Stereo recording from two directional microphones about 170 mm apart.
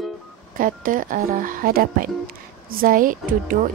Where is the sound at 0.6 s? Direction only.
55° right (ahead or behind).